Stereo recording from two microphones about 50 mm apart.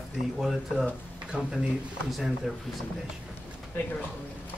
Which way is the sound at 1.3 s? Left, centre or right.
Right.